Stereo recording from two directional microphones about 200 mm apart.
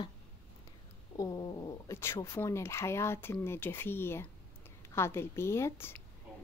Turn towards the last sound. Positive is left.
turn(degrees=10)  # may be behind; listen again after turning